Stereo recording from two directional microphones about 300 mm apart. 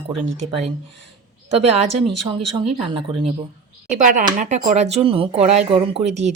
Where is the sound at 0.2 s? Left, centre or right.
Right.